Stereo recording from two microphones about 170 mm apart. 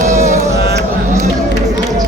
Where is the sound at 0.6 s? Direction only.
75° right (ahead or behind).